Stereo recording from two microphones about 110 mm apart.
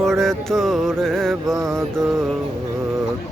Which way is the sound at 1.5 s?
30° right (ahead or behind).